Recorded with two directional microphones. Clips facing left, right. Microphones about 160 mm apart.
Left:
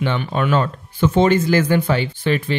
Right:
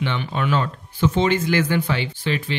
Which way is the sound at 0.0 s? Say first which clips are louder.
Left 4 dB; 45° left (ahead or behind).